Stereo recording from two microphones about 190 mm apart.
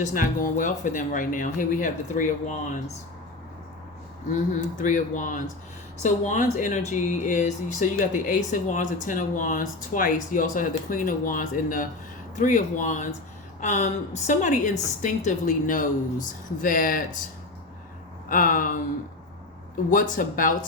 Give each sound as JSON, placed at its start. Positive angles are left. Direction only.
{"t": 0.0, "sound": "speech", "side_deg": 45}
{"t": 4.3, "sound": "speech", "side_deg": 40}
{"t": 18.3, "sound": "speech", "side_deg": 45}
{"t": 19.9, "sound": "speech", "side_deg": 45}